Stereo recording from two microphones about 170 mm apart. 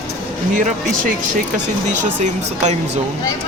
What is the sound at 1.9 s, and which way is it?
Speech, 45° right (ahead or behind).